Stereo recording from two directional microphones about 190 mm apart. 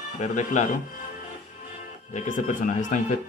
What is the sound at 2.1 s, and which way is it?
Speech, 40° left (ahead or behind).